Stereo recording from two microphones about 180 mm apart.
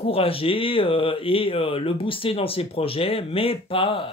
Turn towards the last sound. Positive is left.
turn(degrees=30)  # may be behind; listen again after turning